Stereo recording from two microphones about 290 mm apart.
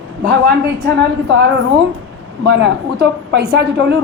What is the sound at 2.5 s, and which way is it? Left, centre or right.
A woman's voice, right.